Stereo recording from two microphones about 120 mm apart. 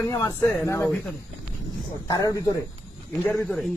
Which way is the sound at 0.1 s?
30° left (ahead or behind).